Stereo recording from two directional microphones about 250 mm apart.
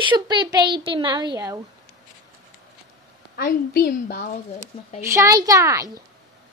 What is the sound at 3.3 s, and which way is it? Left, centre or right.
Speech, left.